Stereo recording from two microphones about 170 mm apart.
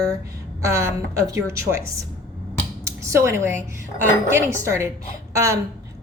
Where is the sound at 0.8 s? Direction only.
20° right (ahead or behind).